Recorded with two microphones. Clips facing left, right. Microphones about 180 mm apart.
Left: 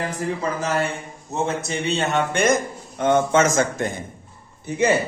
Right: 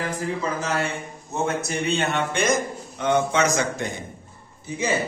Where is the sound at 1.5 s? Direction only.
30° left (ahead or behind).